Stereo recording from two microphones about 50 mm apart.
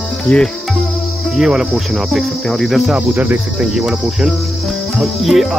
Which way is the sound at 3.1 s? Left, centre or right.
Right.